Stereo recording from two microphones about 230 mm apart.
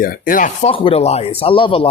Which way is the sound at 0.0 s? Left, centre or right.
Left.